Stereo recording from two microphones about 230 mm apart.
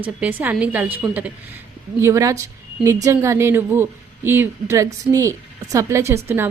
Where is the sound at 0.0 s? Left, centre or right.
Centre.